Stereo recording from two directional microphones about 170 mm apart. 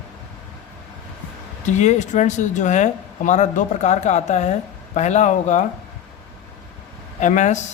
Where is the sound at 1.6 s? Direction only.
45° left (ahead or behind).